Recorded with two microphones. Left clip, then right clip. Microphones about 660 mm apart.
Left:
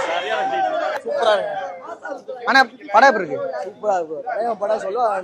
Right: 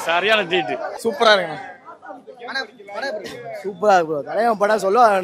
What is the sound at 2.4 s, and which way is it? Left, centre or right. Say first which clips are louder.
Speech: left 13 dB; left.